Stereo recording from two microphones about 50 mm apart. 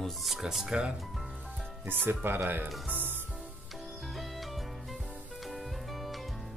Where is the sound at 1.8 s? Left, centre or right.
Right.